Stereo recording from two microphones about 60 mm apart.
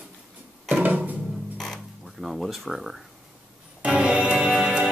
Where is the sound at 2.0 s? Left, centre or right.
Centre.